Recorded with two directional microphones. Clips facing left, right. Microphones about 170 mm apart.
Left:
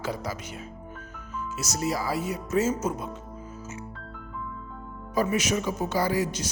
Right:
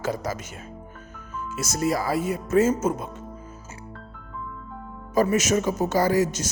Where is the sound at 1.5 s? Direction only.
50° right (ahead or behind).